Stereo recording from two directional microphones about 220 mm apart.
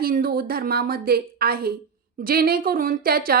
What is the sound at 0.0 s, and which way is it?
A woman's voice, 40° right (ahead or behind).